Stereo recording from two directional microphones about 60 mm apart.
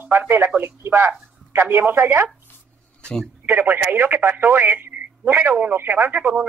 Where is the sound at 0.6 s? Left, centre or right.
Right.